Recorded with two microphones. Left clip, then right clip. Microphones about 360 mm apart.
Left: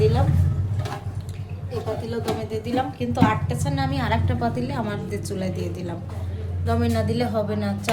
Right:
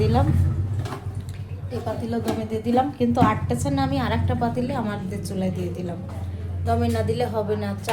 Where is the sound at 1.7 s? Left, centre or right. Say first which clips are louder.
Even; centre.